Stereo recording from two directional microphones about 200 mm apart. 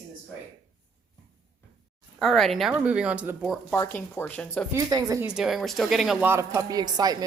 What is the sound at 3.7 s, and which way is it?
Speech, 10° left (ahead or behind).